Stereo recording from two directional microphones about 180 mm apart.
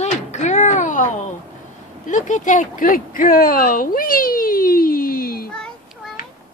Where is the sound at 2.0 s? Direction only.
45° left (ahead or behind).